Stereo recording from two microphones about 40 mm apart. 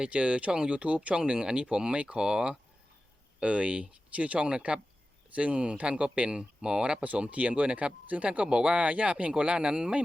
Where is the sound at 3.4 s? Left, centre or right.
Right.